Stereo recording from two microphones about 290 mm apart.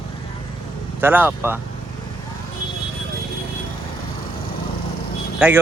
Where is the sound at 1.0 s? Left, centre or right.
Centre.